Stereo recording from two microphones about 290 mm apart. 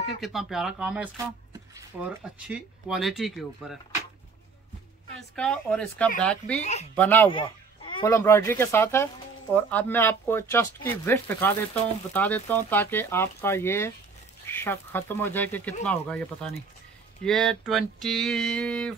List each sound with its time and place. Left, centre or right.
0.2 s speech: centre
5.3 s speech: centre
6.6 s speech: left
7.0 s speech: centre
7.2 s speech: centre